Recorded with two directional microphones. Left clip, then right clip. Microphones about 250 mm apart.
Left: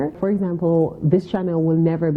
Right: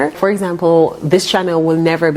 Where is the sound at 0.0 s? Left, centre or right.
Centre.